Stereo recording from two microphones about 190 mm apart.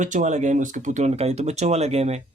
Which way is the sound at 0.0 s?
40° right (ahead or behind).